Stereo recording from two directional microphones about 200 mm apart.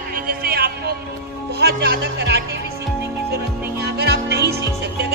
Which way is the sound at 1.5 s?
55° right (ahead or behind).